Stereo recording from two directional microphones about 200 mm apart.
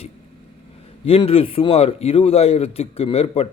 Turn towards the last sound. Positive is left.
turn(degrees=30)  # may be behind; listen again after turning